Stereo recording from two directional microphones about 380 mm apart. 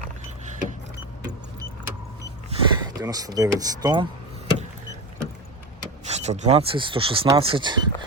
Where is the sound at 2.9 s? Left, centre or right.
Centre.